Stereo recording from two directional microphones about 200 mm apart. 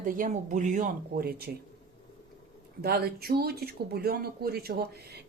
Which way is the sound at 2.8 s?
50° right (ahead or behind).